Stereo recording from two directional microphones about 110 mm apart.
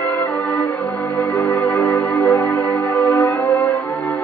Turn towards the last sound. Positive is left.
turn(degrees=25)  # may be behind; listen again after turning